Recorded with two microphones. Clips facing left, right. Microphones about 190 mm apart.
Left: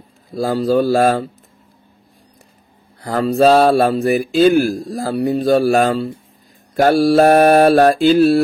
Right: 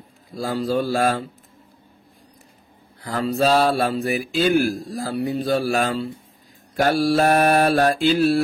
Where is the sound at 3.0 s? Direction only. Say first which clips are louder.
Left 7 dB; 45° left (ahead or behind).